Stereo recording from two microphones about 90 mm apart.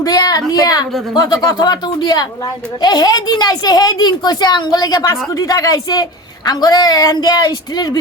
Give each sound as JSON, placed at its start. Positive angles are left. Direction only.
{"t": 0.0, "sound": "a woman's voice", "side_deg": 45}